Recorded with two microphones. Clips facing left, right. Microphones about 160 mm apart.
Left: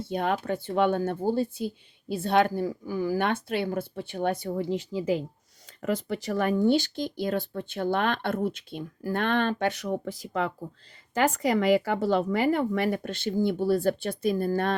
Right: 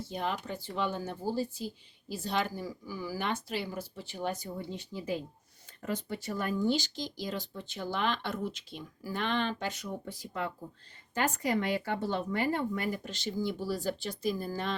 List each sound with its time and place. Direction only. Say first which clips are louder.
0.0 s speech: left 7 dB; 60° left (ahead or behind)